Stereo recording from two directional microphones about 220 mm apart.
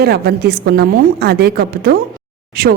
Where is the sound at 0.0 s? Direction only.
45° right (ahead or behind).